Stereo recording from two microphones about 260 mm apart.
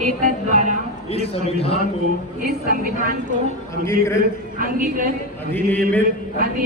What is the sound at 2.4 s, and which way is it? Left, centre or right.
Speech, right.